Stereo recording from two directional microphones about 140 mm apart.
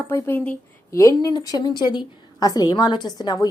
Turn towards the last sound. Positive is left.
turn(degrees=30)  # may be behind; listen again after turning